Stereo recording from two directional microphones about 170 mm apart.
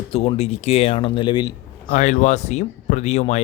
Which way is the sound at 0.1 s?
35° left (ahead or behind).